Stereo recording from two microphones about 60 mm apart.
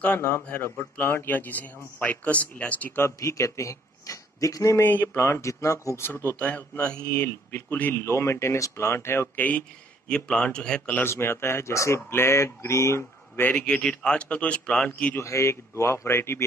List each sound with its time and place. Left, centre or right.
0.7 s a man's voice: left
3.2 s speech: left
4.8 s speech: left
6.0 s speech: left
8.0 s speech: left
9.4 s a man's voice: left
11.0 s speech: left
13.4 s a man's voice: left
15.1 s speech: left